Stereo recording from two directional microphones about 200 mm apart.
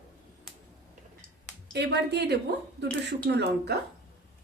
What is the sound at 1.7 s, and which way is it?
A woman's voice, 55° right (ahead or behind).